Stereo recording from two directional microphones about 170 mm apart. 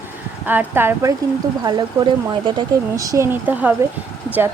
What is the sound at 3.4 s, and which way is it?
Speech, 10° right (ahead or behind).